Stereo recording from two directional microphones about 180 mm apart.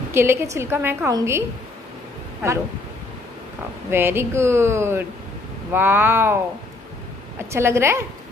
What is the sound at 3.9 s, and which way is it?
A woman's voice, 15° right (ahead or behind).